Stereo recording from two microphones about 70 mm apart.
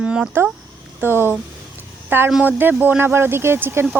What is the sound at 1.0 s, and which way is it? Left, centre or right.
Speech, right.